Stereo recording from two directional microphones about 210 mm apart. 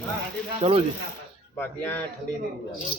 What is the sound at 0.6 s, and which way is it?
Speech, 30° right (ahead or behind).